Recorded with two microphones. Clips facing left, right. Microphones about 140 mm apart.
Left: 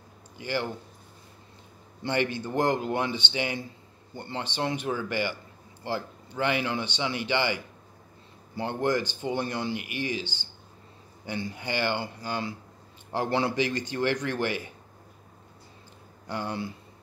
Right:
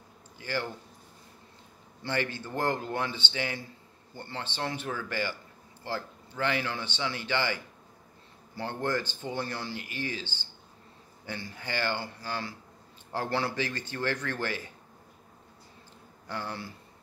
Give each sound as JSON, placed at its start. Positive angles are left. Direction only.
{"t": 0.4, "sound": "speech", "side_deg": 15}
{"t": 2.0, "sound": "speech", "side_deg": 20}
{"t": 16.3, "sound": "speech", "side_deg": 20}